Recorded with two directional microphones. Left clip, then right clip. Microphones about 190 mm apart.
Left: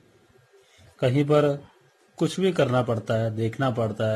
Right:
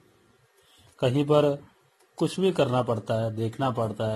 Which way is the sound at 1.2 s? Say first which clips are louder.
Left 1 dB; centre (ahead or behind).